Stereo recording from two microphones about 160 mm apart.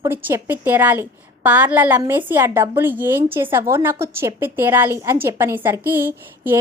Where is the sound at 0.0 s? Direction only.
15° right (ahead or behind).